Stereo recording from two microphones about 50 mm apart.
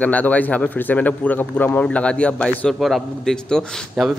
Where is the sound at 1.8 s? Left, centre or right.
Left.